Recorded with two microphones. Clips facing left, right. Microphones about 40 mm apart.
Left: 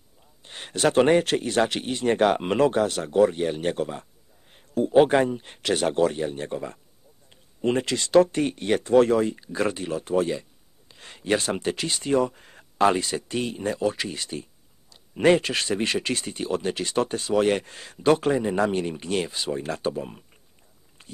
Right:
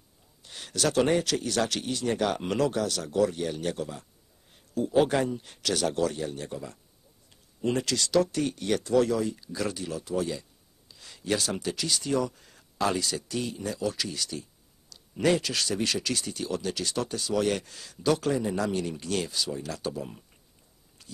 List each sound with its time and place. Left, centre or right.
0.4 s speech: left